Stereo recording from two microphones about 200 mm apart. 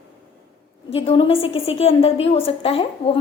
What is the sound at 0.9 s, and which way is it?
A woman's voice, 30° left (ahead or behind).